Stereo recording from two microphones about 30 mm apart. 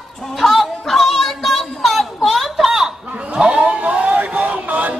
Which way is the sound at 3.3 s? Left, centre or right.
Right.